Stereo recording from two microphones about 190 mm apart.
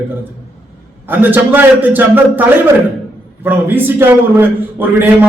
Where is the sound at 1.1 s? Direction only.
10° right (ahead or behind).